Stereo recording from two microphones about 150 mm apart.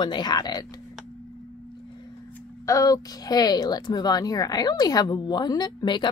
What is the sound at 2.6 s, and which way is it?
Speech, 20° left (ahead or behind).